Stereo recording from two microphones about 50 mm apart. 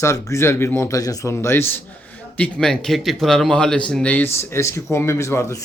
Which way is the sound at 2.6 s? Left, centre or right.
Centre.